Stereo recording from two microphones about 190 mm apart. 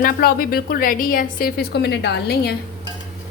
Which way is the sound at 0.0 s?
55° left (ahead or behind).